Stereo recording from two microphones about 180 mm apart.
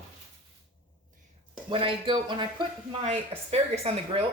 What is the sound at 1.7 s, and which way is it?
Speech, 30° right (ahead or behind).